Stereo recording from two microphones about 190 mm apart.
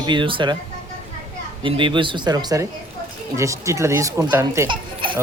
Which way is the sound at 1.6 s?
25° right (ahead or behind).